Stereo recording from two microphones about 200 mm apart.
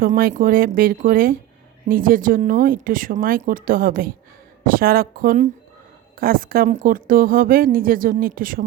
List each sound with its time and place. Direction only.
0.0 s a woman's voice: 45° right (ahead or behind)